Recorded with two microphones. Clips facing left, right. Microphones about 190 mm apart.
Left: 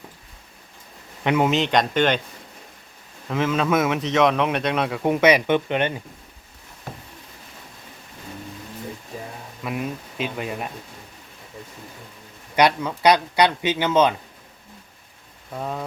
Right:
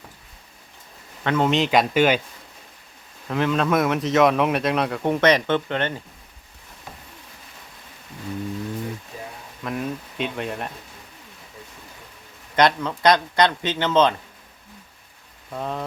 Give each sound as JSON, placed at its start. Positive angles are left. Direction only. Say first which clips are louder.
{"t": 1.2, "sound": "a man's voice", "louder": "left 2 dB", "side_deg": 15}
{"t": 1.5, "sound": "a man's voice", "louder": "right 1 dB", "side_deg": 0}
{"t": 3.2, "sound": "a man's voice", "louder": "even", "side_deg": 0}
{"t": 9.6, "sound": "a man's voice", "louder": "even", "side_deg": 5}
{"t": 12.5, "sound": "speech", "louder": "even", "side_deg": 10}
{"t": 15.5, "sound": "a man's voice", "louder": "even", "side_deg": 5}